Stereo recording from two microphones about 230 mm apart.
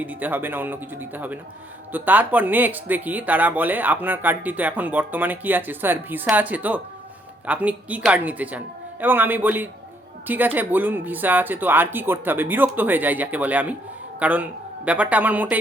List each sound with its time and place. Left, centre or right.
0.0 s speech: centre